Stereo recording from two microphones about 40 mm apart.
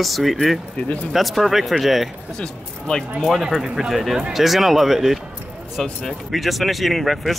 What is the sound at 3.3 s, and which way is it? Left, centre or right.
Speech, centre.